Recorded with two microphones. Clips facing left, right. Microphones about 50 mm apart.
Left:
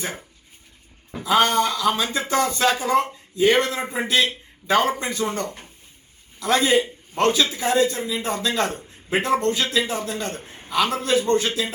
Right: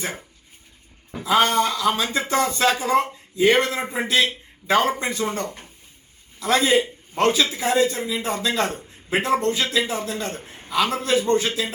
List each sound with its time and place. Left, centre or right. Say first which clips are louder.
0.0 s a man's voice: right 1 dB; centre
5.2 s a man's voice: even; centre
9.4 s speech: even; centre
9.6 s a man's voice: even; centre